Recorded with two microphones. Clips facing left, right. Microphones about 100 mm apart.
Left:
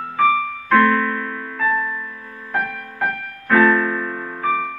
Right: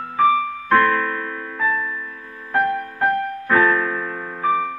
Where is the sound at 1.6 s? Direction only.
Centre (ahead or behind).